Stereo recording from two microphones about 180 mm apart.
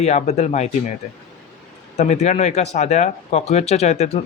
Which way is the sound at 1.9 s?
40° left (ahead or behind).